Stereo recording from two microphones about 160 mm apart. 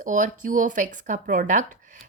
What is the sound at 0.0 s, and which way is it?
A woman's voice, 55° right (ahead or behind).